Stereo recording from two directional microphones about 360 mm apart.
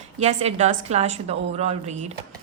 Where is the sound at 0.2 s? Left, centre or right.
Centre.